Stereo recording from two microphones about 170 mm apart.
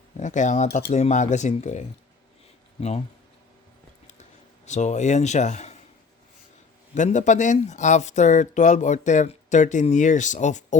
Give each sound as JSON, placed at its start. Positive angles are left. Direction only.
{"t": 0.2, "sound": "speech", "side_deg": 45}
{"t": 4.0, "sound": "a sound", "side_deg": 45}
{"t": 6.9, "sound": "speech", "side_deg": 45}